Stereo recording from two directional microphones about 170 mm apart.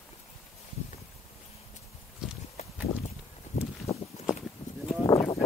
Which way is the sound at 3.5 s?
45° left (ahead or behind).